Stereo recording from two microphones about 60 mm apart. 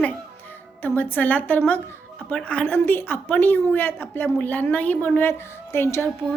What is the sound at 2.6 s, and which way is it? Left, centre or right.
A woman's voice, left.